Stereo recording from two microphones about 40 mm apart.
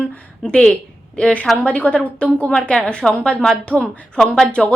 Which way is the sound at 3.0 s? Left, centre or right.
Centre.